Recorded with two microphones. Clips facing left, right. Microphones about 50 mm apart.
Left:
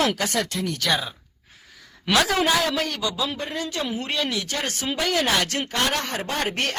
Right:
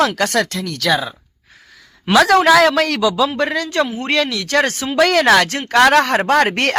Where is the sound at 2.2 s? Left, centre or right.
Right.